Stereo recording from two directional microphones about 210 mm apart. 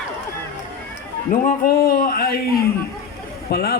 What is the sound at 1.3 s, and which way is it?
A man's voice, 40° left (ahead or behind).